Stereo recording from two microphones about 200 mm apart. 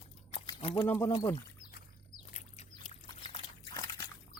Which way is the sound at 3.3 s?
25° left (ahead or behind).